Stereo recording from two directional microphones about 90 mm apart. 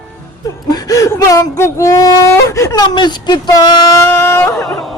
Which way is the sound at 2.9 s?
55° left (ahead or behind).